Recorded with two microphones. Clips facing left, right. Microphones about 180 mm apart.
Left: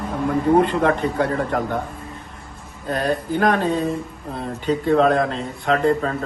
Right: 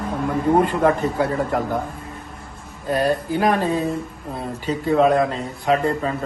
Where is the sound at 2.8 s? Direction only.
10° right (ahead or behind).